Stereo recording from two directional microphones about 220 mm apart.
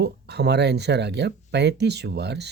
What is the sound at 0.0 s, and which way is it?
Speech, 50° right (ahead or behind).